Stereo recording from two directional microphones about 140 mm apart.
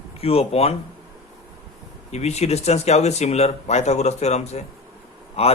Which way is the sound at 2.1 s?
50° left (ahead or behind).